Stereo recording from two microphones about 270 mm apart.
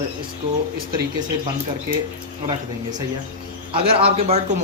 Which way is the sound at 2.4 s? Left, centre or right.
Centre.